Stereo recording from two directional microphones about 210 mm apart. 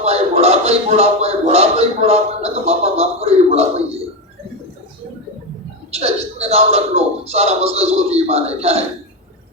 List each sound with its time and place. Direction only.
0.0 s a man's voice: 30° right (ahead or behind)
5.9 s speech: 30° right (ahead or behind)